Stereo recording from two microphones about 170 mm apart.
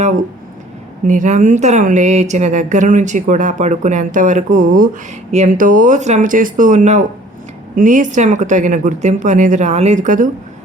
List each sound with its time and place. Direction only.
1.0 s speech: 50° right (ahead or behind)